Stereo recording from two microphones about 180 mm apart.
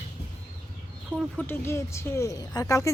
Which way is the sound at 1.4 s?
15° left (ahead or behind).